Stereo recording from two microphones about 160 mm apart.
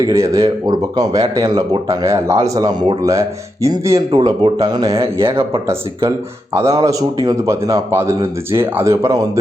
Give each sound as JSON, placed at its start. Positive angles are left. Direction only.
{"t": 0.0, "sound": "speech", "side_deg": -20}